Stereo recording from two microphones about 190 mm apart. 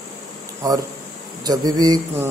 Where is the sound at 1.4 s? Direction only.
20° right (ahead or behind).